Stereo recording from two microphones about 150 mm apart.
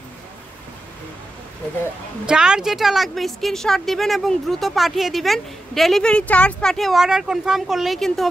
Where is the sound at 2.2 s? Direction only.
5° right (ahead or behind).